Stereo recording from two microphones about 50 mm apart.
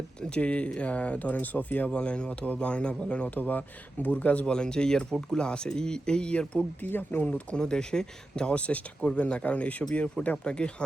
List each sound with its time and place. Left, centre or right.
0.2 s speech: left
1.9 s speech: left
6.8 s speech: left
7.3 s speech: left
7.6 s speech: centre
8.5 s speech: left